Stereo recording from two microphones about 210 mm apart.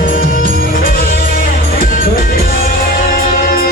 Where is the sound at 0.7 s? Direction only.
40° left (ahead or behind).